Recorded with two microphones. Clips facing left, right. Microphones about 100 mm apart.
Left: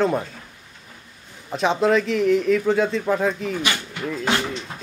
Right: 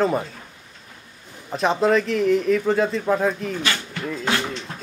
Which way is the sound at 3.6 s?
10° left (ahead or behind).